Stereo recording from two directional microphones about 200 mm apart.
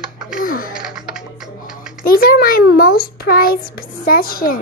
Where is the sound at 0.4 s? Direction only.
45° left (ahead or behind).